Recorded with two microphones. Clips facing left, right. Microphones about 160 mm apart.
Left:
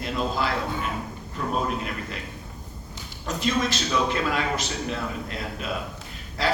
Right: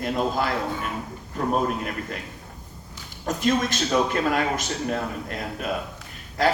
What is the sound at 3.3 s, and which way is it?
A man's voice, 50° right (ahead or behind).